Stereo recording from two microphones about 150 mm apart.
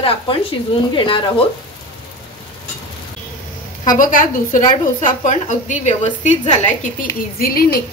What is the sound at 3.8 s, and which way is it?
A woman's voice, 60° left (ahead or behind).